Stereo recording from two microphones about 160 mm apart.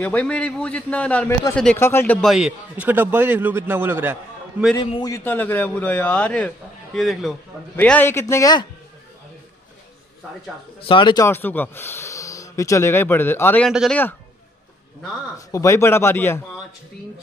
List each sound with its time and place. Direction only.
0.0 s a man's voice: 10° left (ahead or behind)
2.2 s a man's voice: 5° right (ahead or behind)
4.7 s a man's voice: 25° left (ahead or behind)
5.2 s a man's voice: 10° left (ahead or behind)
7.7 s a man's voice: 10° left (ahead or behind)
10.8 s speech: 30° left (ahead or behind)
11.2 s speech: 15° left (ahead or behind)
13.7 s a man's voice: centre (ahead or behind)
15.3 s a man's voice: 20° left (ahead or behind)